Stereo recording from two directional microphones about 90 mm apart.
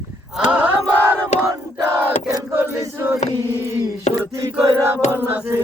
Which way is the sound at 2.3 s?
40° right (ahead or behind).